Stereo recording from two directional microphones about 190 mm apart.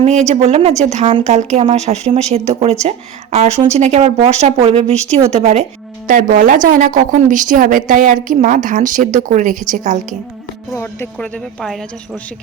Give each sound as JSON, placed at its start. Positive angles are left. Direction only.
{"t": 0.3, "sound": "a woman's voice", "side_deg": -35}
{"t": 10.8, "sound": "speech", "side_deg": 10}
{"t": 11.6, "sound": "a woman's voice", "side_deg": 0}